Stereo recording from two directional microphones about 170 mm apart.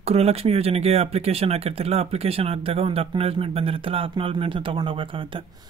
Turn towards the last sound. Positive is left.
turn(degrees=-30)  # may be behind; listen again after turning